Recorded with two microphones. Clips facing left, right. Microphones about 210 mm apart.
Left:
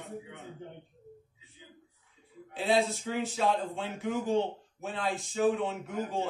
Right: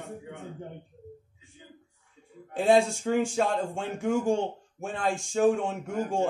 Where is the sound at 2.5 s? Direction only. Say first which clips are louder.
Right 6 dB; 45° right (ahead or behind).